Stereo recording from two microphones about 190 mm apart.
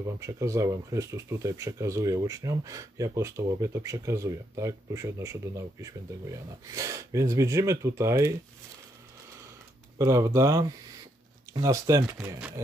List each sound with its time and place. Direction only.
0.0 s speech: 15° right (ahead or behind)
9.9 s speech: 15° right (ahead or behind)